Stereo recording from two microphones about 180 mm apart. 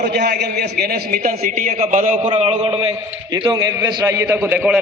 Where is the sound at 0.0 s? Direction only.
65° right (ahead or behind); by 2.3 s 45° right (ahead or behind).